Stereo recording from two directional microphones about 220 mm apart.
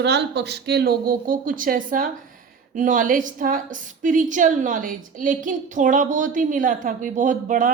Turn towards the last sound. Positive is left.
turn(degrees=-35)  # may be behind; listen again after turning